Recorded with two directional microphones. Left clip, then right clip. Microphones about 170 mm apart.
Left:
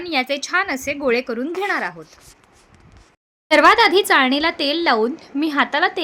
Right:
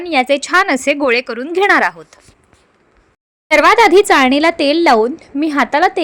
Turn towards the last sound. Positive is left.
turn(degrees=-35)  # may be behind; listen again after turning